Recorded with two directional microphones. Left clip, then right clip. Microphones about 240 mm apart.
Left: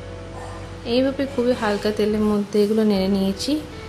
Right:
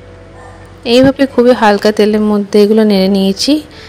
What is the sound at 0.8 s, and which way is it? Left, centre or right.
A woman's voice, right.